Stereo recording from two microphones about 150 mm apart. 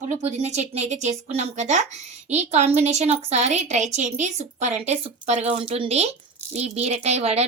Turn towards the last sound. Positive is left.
turn(degrees=-45)  # may be behind; listen again after turning